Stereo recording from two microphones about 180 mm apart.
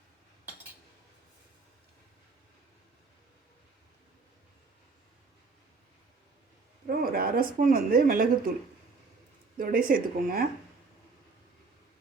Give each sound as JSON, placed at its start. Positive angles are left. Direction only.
{"t": 6.8, "sound": "speech", "side_deg": -55}
{"t": 9.6, "sound": "speech", "side_deg": -50}